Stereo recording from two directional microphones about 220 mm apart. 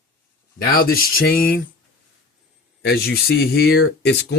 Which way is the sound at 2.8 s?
45° left (ahead or behind).